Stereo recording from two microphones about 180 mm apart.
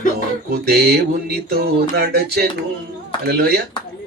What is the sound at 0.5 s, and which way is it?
Mantra, 60° right (ahead or behind).